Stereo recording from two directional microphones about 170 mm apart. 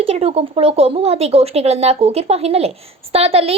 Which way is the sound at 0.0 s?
35° right (ahead or behind).